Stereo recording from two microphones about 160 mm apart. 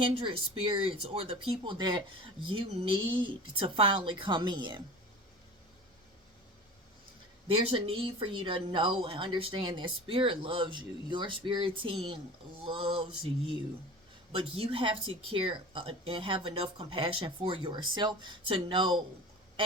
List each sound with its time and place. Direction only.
0.1 s speech: 35° right (ahead or behind)
7.4 s speech: 35° right (ahead or behind)
14.3 s speech: 35° right (ahead or behind)